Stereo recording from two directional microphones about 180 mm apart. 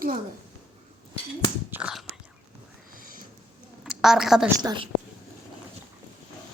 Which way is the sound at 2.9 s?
50° right (ahead or behind).